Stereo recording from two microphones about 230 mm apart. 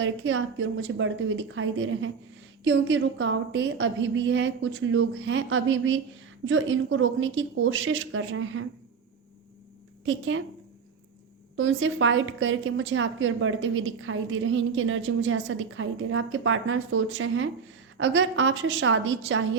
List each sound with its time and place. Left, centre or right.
0.0 s a woman's voice: right
10.1 s a woman's voice: right
11.5 s a woman's voice: right